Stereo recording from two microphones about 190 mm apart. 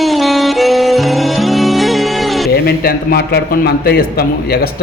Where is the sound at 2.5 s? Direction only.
55° left (ahead or behind).